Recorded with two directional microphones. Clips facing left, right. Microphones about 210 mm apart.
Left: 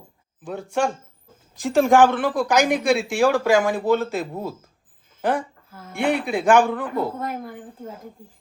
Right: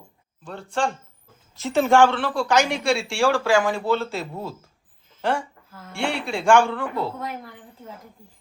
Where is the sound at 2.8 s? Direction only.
Centre (ahead or behind).